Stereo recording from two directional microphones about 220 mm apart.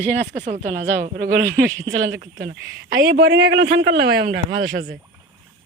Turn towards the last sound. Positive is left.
turn(degrees=-50)  # may be behind; listen again after turning